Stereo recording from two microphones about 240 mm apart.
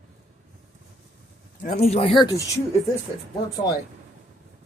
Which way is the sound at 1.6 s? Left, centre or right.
Left.